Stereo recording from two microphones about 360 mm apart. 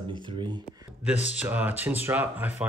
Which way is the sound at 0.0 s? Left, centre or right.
Centre.